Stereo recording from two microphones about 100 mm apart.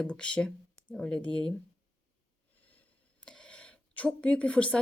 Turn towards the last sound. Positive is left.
turn(degrees=10)  # may be behind; listen again after turning